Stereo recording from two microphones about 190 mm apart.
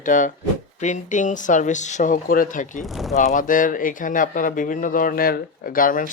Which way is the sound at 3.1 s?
45° left (ahead or behind).